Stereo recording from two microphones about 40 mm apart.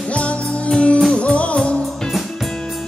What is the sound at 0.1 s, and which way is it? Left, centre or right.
Music, left.